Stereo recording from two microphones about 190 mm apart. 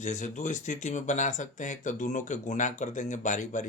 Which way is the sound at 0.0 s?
40° left (ahead or behind).